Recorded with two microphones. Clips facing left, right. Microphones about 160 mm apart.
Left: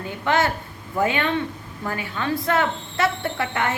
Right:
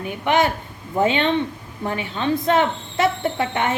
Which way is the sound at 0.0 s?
15° right (ahead or behind).